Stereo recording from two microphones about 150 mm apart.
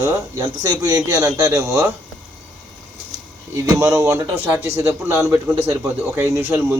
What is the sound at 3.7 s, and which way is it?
A man's voice, 20° right (ahead or behind).